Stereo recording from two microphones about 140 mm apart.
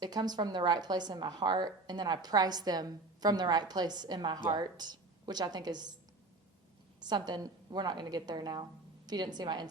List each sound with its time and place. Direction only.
0.0 s a woman's voice: 30° right (ahead or behind)
7.0 s a woman's voice: 30° right (ahead or behind)